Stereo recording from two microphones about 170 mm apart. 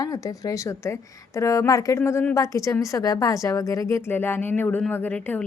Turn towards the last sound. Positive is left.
turn(degrees=10)  # may be behind; listen again after turning